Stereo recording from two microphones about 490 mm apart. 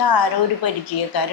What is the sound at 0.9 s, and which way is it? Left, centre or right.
Speech, left.